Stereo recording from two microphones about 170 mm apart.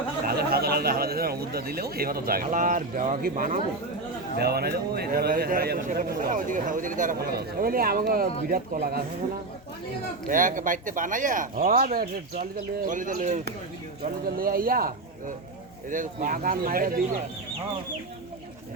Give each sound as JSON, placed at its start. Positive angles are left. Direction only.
{"t": 0.3, "sound": "a man's voice", "side_deg": -65}
{"t": 4.4, "sound": "a man's voice", "side_deg": -65}
{"t": 10.2, "sound": "speech", "side_deg": -50}
{"t": 14.3, "sound": "a man's voice", "side_deg": -60}